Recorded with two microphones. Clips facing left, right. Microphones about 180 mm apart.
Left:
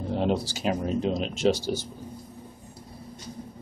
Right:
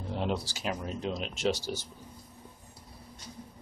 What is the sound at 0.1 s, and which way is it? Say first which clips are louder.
Speech: left 6 dB; 30° left (ahead or behind).